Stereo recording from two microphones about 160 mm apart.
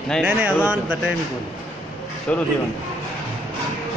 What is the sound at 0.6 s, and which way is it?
Speech, 5° right (ahead or behind).